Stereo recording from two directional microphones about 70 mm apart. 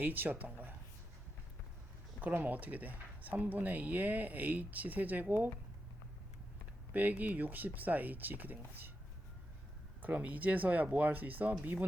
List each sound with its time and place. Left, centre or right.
0.0 s speech: right
2.2 s speech: right
6.9 s speech: right
10.0 s speech: right